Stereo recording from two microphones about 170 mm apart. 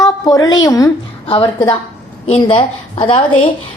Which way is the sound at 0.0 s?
20° left (ahead or behind).